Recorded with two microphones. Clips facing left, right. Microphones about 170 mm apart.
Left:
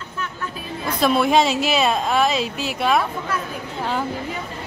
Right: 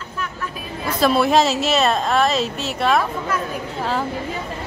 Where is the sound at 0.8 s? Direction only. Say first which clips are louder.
Right 1 dB; centre (ahead or behind).